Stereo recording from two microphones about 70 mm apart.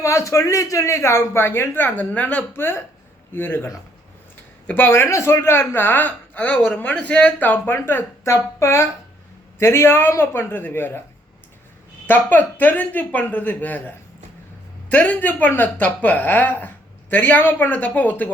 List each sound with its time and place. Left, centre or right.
0.0 s speech: left
2.5 s speech: left
5.0 s speech: left
12.0 s speech: left